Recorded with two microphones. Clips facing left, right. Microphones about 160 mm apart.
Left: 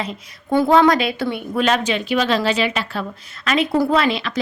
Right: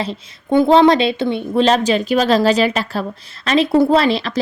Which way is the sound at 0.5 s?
25° right (ahead or behind).